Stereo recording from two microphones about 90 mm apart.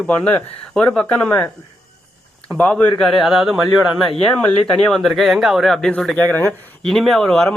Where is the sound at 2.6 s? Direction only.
10° left (ahead or behind).